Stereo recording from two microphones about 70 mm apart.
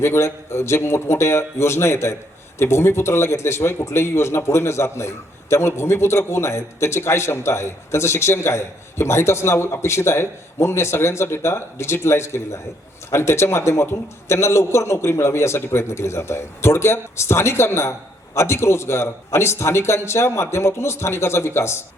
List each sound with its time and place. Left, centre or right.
0.0 s a man's voice: left